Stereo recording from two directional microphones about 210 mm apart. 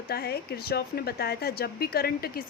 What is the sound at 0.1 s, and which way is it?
A woman's voice, 50° left (ahead or behind).